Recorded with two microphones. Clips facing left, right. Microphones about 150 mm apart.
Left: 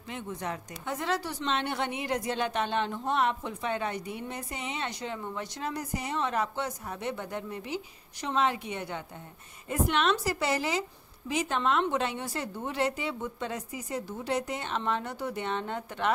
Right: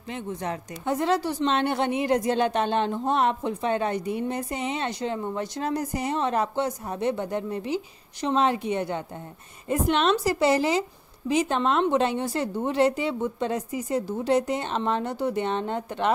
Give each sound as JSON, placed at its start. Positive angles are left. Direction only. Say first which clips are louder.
{"t": 0.1, "sound": "a woman's voice", "louder": "right 5 dB", "side_deg": -30}